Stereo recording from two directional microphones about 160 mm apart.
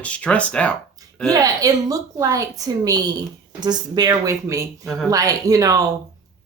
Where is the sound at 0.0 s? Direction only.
5° left (ahead or behind).